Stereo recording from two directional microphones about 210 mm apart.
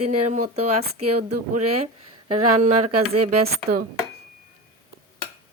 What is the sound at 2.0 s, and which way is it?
Speech, 90° right.